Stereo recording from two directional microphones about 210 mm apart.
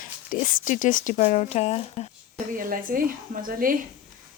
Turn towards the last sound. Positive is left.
turn(degrees=-40)  # may be behind; listen again after turning